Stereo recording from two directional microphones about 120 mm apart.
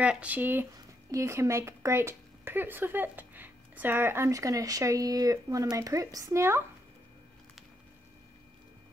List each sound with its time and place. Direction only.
0.0 s speech: 10° right (ahead or behind)